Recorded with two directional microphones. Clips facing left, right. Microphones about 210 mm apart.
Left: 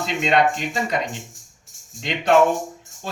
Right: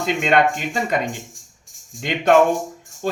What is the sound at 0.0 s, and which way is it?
Speech, 50° right (ahead or behind).